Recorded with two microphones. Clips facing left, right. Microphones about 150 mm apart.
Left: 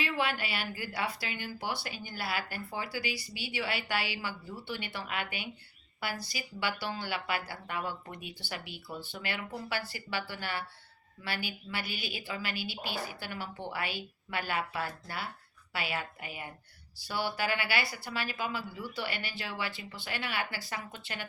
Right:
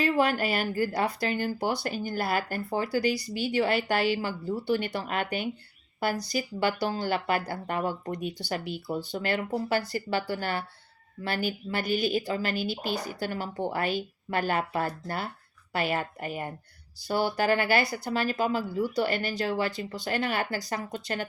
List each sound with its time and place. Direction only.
0.0 s speech: 40° right (ahead or behind)